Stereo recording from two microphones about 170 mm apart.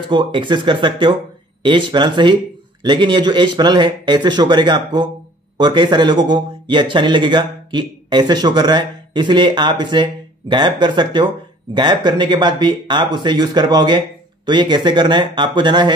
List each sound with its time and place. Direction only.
0.1 s speech: 30° right (ahead or behind)